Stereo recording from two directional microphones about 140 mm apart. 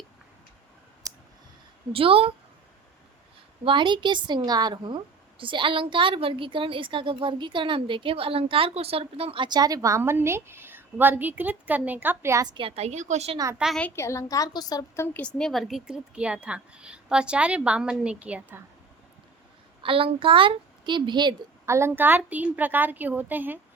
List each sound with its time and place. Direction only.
1.9 s a woman's voice: 40° right (ahead or behind)
3.6 s a woman's voice: 35° right (ahead or behind); by 12.5 s 20° right (ahead or behind)
12.5 s a woman's voice: 40° right (ahead or behind); by 13.3 s 55° right (ahead or behind)
13.6 s a woman's voice: centre (ahead or behind)
13.8 s a woman's voice: 20° left (ahead or behind)
15.0 s a woman's voice: 10° left (ahead or behind); by 18.6 s 10° right (ahead or behind)
19.8 s a woman's voice: 40° right (ahead or behind)
21.7 s a woman's voice: 20° right (ahead or behind)